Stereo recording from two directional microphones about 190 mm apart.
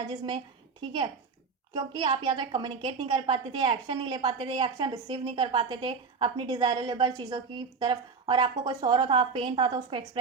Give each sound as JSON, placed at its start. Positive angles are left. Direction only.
{"t": 0.1, "sound": "a woman's voice", "side_deg": -25}